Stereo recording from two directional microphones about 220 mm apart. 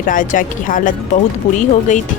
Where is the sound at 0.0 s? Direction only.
35° left (ahead or behind).